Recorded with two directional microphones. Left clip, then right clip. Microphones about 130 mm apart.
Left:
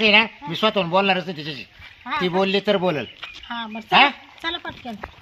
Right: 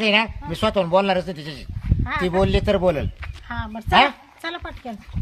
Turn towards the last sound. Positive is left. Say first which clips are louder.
# left 2 dB
turn(degrees=-15)  # may be behind; listen again after turning